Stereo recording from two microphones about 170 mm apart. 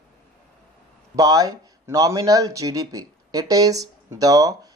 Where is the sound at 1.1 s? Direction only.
20° right (ahead or behind).